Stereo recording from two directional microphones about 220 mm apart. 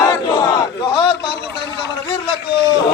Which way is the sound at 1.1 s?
50° left (ahead or behind).